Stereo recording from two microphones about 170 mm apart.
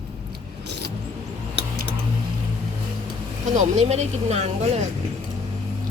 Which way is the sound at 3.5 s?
45° right (ahead or behind).